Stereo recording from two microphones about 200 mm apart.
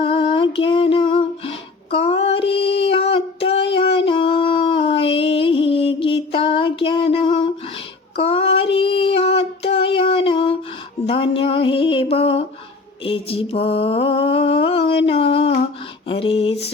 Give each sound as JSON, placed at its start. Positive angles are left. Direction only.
{"t": 0.0, "sound": "music", "side_deg": 25}
{"t": 8.1, "sound": "child singing", "side_deg": 25}
{"t": 11.0, "sound": "a sound", "side_deg": 25}